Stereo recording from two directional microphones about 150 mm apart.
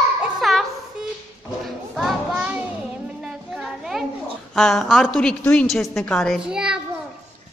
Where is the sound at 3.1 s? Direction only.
5° right (ahead or behind).